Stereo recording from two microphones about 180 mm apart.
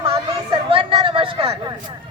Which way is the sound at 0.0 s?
30° right (ahead or behind).